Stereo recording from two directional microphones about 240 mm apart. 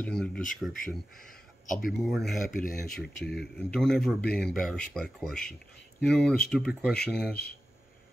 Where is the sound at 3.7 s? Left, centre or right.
Centre.